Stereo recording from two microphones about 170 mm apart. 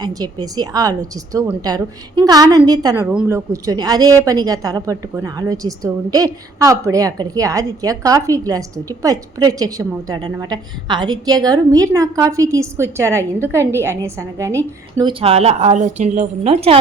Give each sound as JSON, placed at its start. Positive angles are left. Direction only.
{"t": 0.0, "sound": "a woman's voice", "side_deg": -25}
{"t": 3.1, "sound": "a woman's voice", "side_deg": -10}
{"t": 15.2, "sound": "speech", "side_deg": -35}